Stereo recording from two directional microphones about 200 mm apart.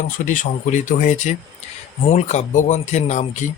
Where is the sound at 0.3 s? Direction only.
40° left (ahead or behind).